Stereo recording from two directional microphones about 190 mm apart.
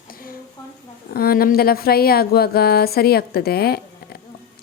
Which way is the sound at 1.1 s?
50° left (ahead or behind).